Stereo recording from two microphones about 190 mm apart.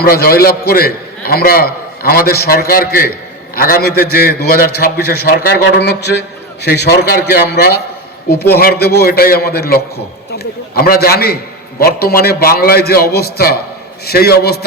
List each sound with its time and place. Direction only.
0.0 s a man's voice: 55° left (ahead or behind)